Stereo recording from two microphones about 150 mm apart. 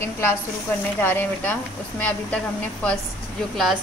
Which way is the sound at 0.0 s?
15° left (ahead or behind).